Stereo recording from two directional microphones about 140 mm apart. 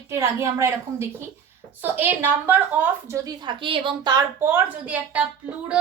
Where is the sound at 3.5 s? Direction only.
35° right (ahead or behind).